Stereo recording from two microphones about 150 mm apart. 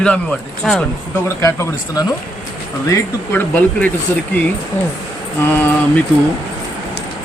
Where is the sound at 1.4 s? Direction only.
20° left (ahead or behind).